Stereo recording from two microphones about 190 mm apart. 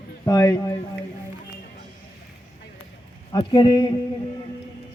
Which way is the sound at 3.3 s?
25° left (ahead or behind).